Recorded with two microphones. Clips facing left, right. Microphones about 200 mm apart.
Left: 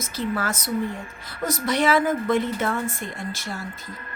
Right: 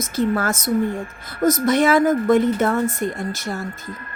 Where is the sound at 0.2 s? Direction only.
45° right (ahead or behind).